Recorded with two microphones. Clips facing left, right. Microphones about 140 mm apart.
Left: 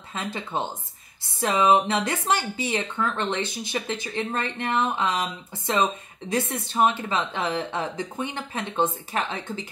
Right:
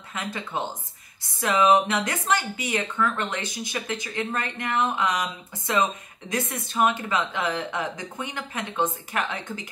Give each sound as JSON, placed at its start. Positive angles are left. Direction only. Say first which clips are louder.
{"t": 0.1, "sound": "speech", "louder": "left 1 dB", "side_deg": 25}